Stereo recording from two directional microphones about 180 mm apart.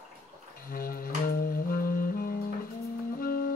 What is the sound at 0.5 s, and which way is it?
Music, 55° left (ahead or behind).